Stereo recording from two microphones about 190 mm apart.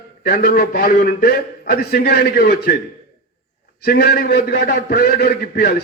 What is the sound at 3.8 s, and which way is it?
A man's voice, 55° left (ahead or behind).